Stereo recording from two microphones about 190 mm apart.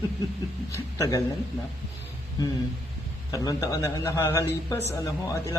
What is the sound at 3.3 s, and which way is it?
Speech, 20° left (ahead or behind).